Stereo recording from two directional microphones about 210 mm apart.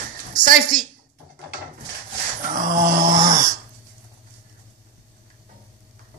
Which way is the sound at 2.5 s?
40° right (ahead or behind).